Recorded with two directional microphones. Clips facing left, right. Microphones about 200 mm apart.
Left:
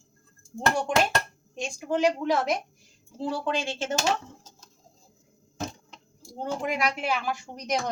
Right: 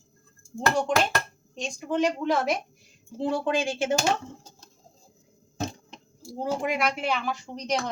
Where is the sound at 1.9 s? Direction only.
5° left (ahead or behind).